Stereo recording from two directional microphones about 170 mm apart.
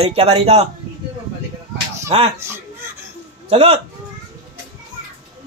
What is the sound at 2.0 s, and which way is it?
Speech, 35° right (ahead or behind).